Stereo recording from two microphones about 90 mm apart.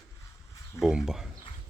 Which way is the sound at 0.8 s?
5° right (ahead or behind).